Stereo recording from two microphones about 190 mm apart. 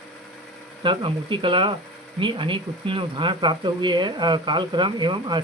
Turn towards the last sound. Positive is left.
turn(degrees=-25)  # may be behind; listen again after turning